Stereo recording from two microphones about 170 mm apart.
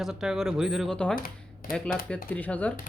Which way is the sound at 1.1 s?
55° left (ahead or behind).